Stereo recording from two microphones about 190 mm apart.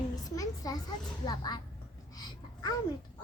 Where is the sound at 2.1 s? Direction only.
20° left (ahead or behind).